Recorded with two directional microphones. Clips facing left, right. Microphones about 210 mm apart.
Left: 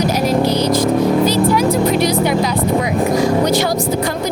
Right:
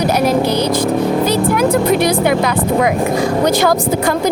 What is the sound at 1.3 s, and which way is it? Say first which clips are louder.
Music: right 1 dB; 55° right (ahead or behind).